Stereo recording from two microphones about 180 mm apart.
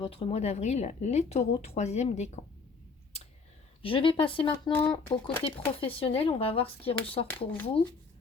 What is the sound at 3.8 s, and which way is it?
Speech, 30° left (ahead or behind).